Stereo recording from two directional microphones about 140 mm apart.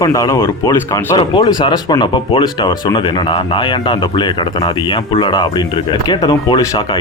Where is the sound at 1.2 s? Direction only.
35° left (ahead or behind).